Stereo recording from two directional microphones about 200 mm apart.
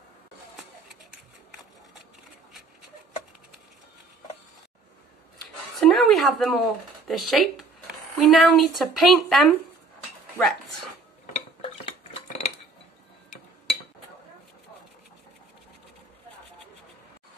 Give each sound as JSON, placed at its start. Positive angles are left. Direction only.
{"t": 5.8, "sound": "a sound", "side_deg": 0}
{"t": 7.1, "sound": "a woman's voice", "side_deg": 0}
{"t": 11.6, "sound": "dishes", "side_deg": 30}